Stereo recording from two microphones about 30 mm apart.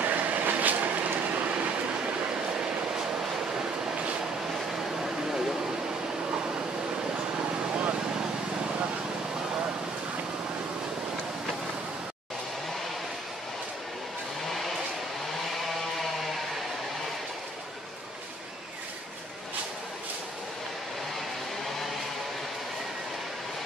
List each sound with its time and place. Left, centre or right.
0.0 s vehicle: right
3.9 s vehicle: right
4.7 s a sound: centre